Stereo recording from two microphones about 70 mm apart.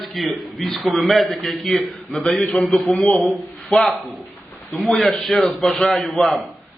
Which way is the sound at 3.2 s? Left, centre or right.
Left.